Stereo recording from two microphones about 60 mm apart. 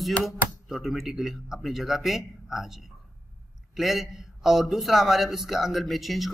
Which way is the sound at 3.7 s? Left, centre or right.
Centre.